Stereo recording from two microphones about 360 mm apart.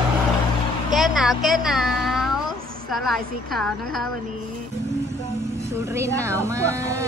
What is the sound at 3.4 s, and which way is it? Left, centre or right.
Speech, centre.